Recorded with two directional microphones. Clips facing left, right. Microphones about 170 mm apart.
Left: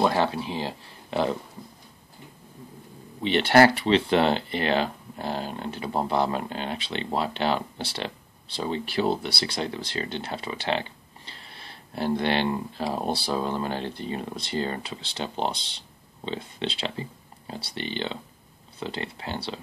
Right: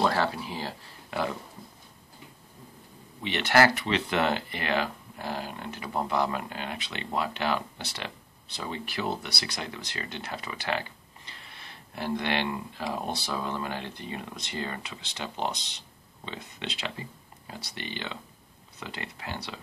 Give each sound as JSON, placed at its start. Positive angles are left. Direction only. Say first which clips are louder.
{"t": 0.0, "sound": "speech", "louder": "left 3 dB", "side_deg": 20}
{"t": 3.2, "sound": "speech", "louder": "left 5 dB", "side_deg": 30}